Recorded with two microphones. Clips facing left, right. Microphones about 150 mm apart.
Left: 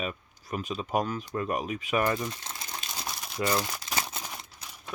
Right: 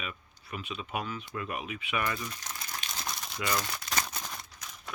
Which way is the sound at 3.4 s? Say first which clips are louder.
Left 5 dB; 30° left (ahead or behind).